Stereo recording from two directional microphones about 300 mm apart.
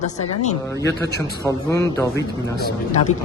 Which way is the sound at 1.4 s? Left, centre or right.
Centre.